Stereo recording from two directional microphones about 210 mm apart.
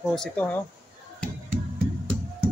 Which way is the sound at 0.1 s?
5° left (ahead or behind).